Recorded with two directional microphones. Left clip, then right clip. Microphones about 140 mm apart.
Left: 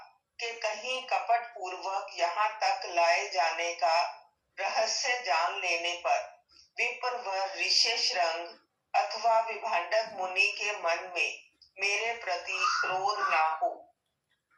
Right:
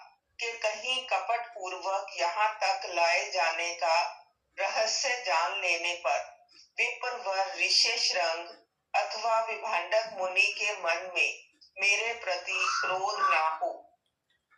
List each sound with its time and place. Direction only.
0.3 s music: 30° right (ahead or behind)
1.6 s a man's voice: 30° right (ahead or behind)